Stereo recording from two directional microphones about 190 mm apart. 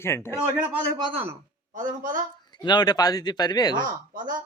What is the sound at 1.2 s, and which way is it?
Speech, 35° right (ahead or behind).